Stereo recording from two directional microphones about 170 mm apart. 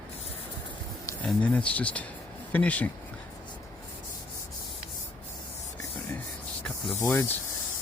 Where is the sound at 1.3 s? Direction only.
5° left (ahead or behind).